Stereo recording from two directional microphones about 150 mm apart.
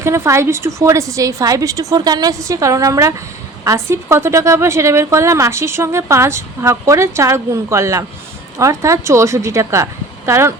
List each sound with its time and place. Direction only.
0.0 s a woman's voice: 20° right (ahead or behind)